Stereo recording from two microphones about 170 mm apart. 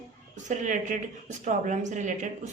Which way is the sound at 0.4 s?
45° right (ahead or behind).